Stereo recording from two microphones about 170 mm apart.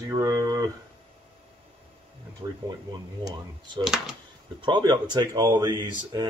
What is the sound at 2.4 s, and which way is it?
Speech, 30° right (ahead or behind).